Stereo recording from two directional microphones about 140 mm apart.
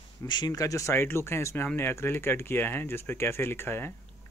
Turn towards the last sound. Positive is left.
turn(degrees=15)  # may be behind; listen again after turning